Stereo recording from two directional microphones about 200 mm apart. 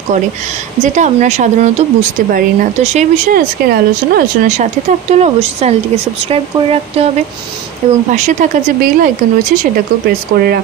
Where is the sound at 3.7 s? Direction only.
50° right (ahead or behind).